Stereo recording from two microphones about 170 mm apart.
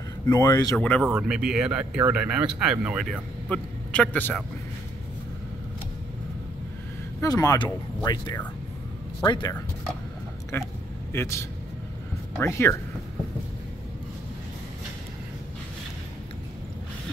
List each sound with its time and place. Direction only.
0.3 s speech: 25° left (ahead or behind)
0.7 s speech: 5° left (ahead or behind)
1.0 s speech: 5° right (ahead or behind)
3.1 s a man's voice: 5° left (ahead or behind)
7.2 s speech: 20° left (ahead or behind)
10.5 s a sound: 15° left (ahead or behind)
11.1 s speech: 15° left (ahead or behind)